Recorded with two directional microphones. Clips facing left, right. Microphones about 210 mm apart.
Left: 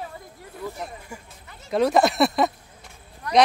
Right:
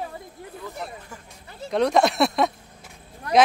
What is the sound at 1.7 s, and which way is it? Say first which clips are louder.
Speech: even; centre (ahead or behind).